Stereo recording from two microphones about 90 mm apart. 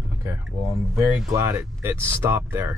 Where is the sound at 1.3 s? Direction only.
35° right (ahead or behind).